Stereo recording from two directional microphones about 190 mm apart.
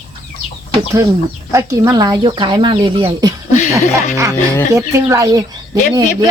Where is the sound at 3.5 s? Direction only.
40° left (ahead or behind).